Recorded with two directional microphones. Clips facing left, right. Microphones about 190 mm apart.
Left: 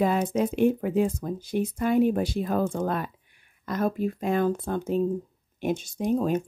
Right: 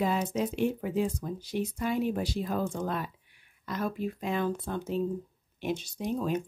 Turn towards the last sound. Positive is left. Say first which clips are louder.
# left 6 dB
turn(degrees=45)  # may be behind; listen again after turning